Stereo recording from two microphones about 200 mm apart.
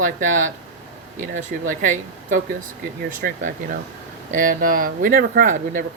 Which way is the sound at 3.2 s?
50° right (ahead or behind).